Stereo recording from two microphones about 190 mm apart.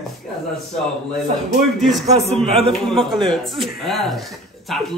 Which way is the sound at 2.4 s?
30° right (ahead or behind).